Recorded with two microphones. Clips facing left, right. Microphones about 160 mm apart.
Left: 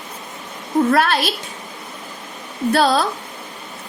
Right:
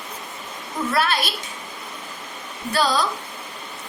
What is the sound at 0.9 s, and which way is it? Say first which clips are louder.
Speech: left 2 dB; 55° left (ahead or behind).